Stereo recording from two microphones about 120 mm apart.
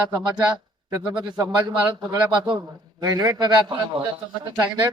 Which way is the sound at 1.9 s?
40° right (ahead or behind).